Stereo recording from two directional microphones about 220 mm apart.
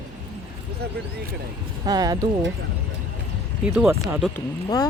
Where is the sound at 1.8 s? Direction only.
15° right (ahead or behind).